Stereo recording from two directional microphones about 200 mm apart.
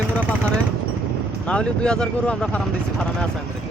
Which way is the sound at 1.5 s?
5° left (ahead or behind).